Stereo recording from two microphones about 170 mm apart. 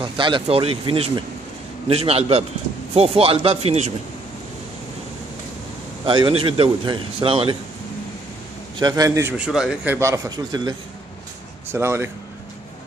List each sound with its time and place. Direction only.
0.0 s speech: 30° right (ahead or behind)
6.0 s a man's voice: 30° right (ahead or behind)
8.7 s a man's voice: 25° right (ahead or behind)
9.4 s speech: 5° right (ahead or behind)
9.9 s a man's voice: 20° right (ahead or behind)